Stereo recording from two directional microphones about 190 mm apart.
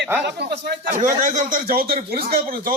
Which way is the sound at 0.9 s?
40° right (ahead or behind).